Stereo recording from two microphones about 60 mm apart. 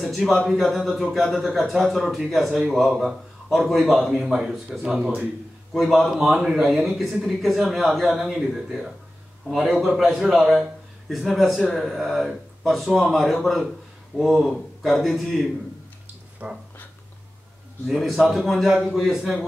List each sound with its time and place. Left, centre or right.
0.0 s a man's voice: centre
5.7 s a man's voice: centre
16.4 s a sound: right
17.8 s a man's voice: centre